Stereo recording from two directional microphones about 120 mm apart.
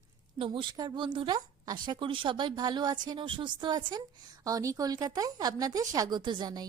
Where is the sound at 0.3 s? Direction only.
45° right (ahead or behind).